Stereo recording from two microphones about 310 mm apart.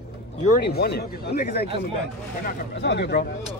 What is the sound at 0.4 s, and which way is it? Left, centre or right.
Speech, left.